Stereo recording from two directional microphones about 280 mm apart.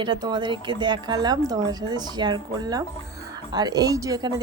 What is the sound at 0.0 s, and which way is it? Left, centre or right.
A woman's voice, centre.